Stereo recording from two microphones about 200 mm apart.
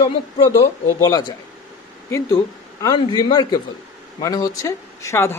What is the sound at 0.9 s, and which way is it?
Speech, 15° left (ahead or behind).